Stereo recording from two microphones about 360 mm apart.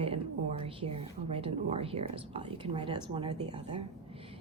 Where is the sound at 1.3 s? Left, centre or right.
Centre.